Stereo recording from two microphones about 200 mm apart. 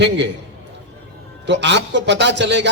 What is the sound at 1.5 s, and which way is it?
A man's voice, 60° right (ahead or behind).